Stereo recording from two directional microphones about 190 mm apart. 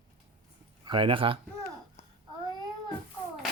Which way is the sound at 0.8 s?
25° right (ahead or behind).